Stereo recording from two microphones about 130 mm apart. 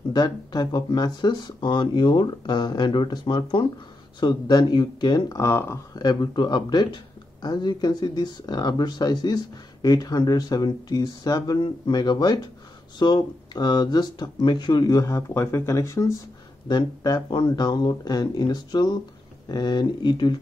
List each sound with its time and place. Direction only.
0.1 s speech: 30° left (ahead or behind)
5.9 s speech: 35° left (ahead or behind)
16.6 s speech: 35° left (ahead or behind)